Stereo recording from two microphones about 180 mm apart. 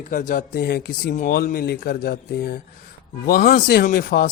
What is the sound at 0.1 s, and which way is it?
Speech, 50° left (ahead or behind).